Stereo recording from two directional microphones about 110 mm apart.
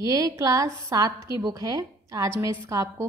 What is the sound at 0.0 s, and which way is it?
A woman's voice, 30° right (ahead or behind).